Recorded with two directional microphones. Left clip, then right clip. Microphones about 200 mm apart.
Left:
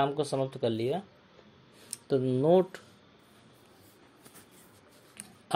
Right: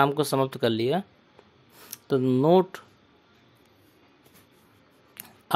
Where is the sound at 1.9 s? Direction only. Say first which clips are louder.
Right 4 dB; 25° right (ahead or behind).